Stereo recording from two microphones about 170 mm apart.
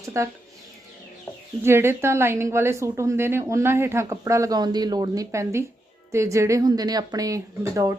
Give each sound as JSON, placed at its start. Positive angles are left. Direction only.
{"t": 0.1, "sound": "a woman's voice", "side_deg": -15}
{"t": 1.6, "sound": "a woman's voice", "side_deg": -15}